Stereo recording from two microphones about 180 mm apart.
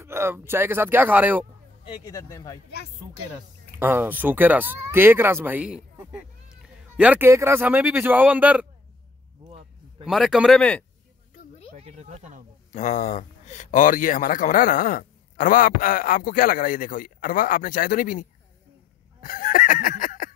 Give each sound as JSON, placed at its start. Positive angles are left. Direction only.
{"t": 0.0, "sound": "speech", "side_deg": -15}
{"t": 2.1, "sound": "speech", "side_deg": 15}
{"t": 3.7, "sound": "speech", "side_deg": -10}
{"t": 9.5, "sound": "a sound", "side_deg": -35}
{"t": 10.0, "sound": "speech", "side_deg": 0}
{"t": 11.7, "sound": "snake", "side_deg": -40}
{"t": 12.7, "sound": "speech", "side_deg": 40}
{"t": 19.2, "sound": "a sound", "side_deg": 50}